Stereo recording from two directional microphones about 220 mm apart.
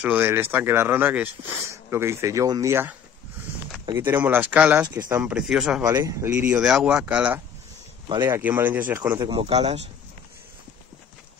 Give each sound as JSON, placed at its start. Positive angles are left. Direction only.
{"t": 0.0, "sound": "speech", "side_deg": -10}
{"t": 4.9, "sound": "speech", "side_deg": -15}
{"t": 5.2, "sound": "speech", "side_deg": -5}
{"t": 5.9, "sound": "speech", "side_deg": -15}
{"t": 8.1, "sound": "speech", "side_deg": -20}
{"t": 8.4, "sound": "speech", "side_deg": -10}
{"t": 9.3, "sound": "speech", "side_deg": -25}